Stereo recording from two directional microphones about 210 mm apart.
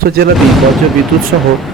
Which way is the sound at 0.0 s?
45° right (ahead or behind).